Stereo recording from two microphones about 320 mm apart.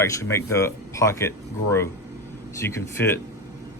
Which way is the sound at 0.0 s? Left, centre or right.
Centre.